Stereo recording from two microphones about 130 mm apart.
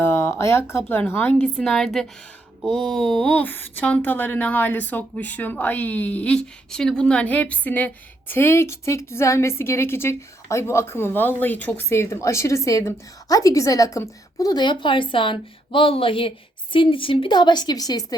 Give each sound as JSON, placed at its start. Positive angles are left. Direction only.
{"t": 0.0, "sound": "speech", "side_deg": 20}
{"t": 1.5, "sound": "a woman's voice", "side_deg": 5}